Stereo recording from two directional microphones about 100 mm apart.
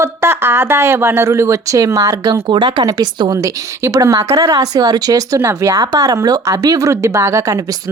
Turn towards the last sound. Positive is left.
turn(degrees=-35)  # may be behind; listen again after turning